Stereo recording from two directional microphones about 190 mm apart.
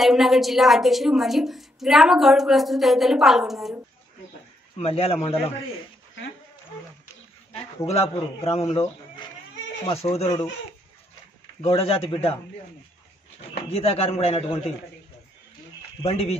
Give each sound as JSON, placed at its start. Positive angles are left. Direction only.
{"t": 0.0, "sound": "a woman's voice", "side_deg": 0}
{"t": 4.7, "sound": "speech", "side_deg": 30}
{"t": 7.5, "sound": "a man's voice", "side_deg": 30}
{"t": 11.6, "sound": "speech", "side_deg": 30}
{"t": 13.7, "sound": "speech", "side_deg": 30}
{"t": 16.0, "sound": "speech", "side_deg": 30}